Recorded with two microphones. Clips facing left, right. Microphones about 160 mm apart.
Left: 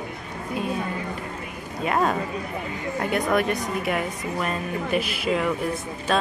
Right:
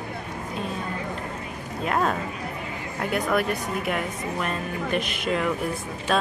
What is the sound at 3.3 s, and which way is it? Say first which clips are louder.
A woman's voice: left 2 dB; centre (ahead or behind).